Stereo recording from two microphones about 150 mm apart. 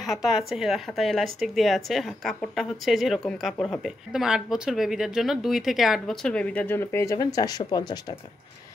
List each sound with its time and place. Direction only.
0.0 s speech: centre (ahead or behind); by 8.2 s 30° left (ahead or behind)